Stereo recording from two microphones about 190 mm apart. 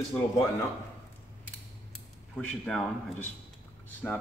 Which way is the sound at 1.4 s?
5° left (ahead or behind).